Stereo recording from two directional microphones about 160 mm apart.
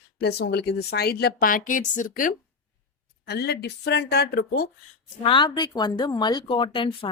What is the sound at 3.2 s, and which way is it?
Speech, 90° left.